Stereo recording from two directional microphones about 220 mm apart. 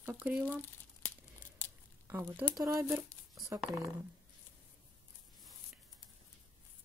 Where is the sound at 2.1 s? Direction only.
10° right (ahead or behind).